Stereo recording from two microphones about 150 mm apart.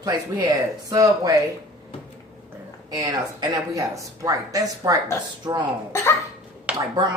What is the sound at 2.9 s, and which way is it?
Speech, 25° right (ahead or behind).